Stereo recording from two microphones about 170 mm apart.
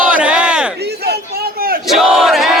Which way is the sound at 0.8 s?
70° right (ahead or behind).